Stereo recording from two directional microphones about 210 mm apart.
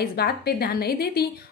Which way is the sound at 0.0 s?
45° left (ahead or behind).